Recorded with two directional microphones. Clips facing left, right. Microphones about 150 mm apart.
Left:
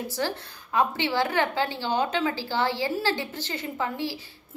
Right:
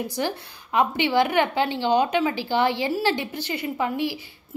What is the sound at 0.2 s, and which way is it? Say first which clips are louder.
A woman's voice: right 2 dB; 20° right (ahead or behind).